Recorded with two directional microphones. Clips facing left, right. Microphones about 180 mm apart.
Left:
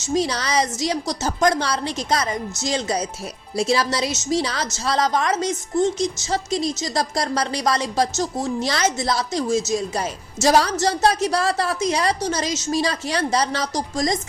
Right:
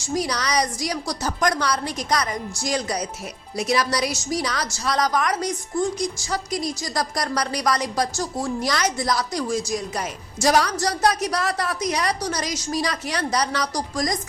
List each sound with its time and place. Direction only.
0.0 s a woman's voice: 25° left (ahead or behind)